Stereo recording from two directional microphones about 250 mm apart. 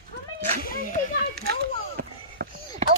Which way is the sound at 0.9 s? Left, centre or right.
Right.